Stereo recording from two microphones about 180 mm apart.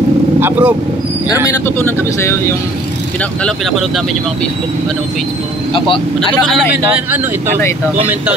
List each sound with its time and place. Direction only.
0.4 s speech: 10° right (ahead or behind)
1.8 s speech: 10° left (ahead or behind)
3.4 s speech: centre (ahead or behind)
6.1 s speech: centre (ahead or behind)